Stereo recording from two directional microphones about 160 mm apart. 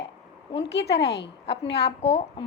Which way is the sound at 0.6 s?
90° left.